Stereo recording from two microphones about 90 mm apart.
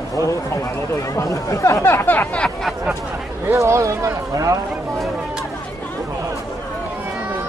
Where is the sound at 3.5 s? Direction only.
30° right (ahead or behind).